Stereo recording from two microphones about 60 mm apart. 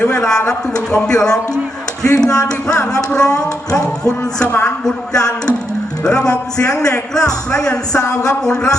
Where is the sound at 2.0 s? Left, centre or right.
Left.